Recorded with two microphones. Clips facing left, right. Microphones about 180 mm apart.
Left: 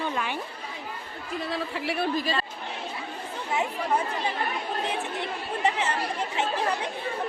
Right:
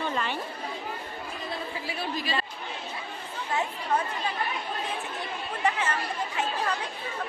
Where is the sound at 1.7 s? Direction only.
70° left (ahead or behind).